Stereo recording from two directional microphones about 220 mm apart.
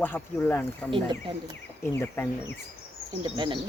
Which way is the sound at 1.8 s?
10° left (ahead or behind).